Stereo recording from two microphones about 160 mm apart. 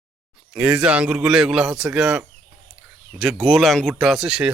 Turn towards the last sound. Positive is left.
turn(degrees=-5)  # may be behind; listen again after turning